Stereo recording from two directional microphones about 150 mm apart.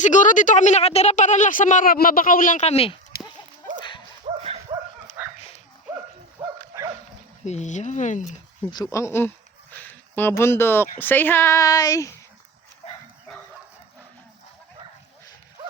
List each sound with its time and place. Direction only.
0.0 s speech: 55° left (ahead or behind)
2.6 s speech: 40° left (ahead or behind)
4.3 s dog: 45° right (ahead or behind)
4.7 s dog: 30° right (ahead or behind)
5.2 s dog: 10° right (ahead or behind)
6.4 s bow-wow: 25° right (ahead or behind)
7.4 s speech: 50° left (ahead or behind)
8.7 s speech: 20° left (ahead or behind)
9.7 s a sound: 15° left (ahead or behind)
10.9 s speech: 10° left (ahead or behind)
12.8 s dog: 45° left (ahead or behind)